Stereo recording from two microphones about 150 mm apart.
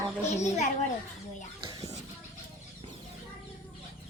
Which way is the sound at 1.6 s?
25° right (ahead or behind).